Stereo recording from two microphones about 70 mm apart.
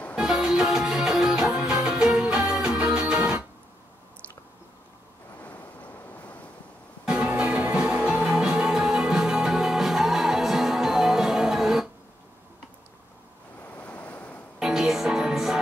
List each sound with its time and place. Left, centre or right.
0.1 s music: centre
5.4 s vehicle: left
7.1 s music: centre
13.7 s waves: left
14.6 s music: centre